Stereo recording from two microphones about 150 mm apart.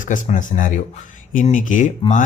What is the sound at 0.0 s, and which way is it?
Speech, 60° left (ahead or behind).